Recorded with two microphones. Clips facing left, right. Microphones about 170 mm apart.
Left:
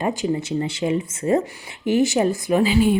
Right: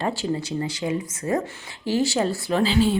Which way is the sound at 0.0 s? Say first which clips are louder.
Left 3 dB; 15° left (ahead or behind).